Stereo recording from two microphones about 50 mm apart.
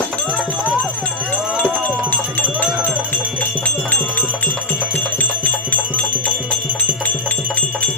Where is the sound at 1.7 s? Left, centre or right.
Right.